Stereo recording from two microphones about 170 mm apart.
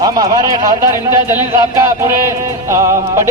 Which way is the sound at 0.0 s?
20° right (ahead or behind).